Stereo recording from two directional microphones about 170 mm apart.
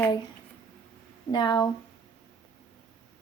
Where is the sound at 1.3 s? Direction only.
25° left (ahead or behind).